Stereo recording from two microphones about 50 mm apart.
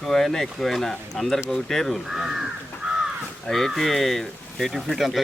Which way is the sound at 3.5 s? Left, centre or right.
Centre.